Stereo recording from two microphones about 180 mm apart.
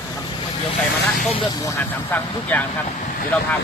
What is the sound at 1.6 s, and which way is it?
Speech, 10° left (ahead or behind).